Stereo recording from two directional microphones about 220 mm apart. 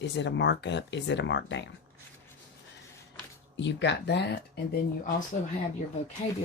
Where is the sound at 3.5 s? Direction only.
55° left (ahead or behind).